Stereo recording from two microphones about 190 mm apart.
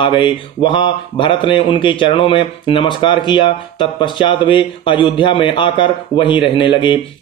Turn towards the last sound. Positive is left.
turn(degrees=25)  # may be behind; listen again after turning